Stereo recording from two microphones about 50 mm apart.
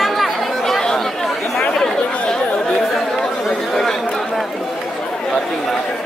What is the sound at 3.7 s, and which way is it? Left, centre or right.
Chatter, centre.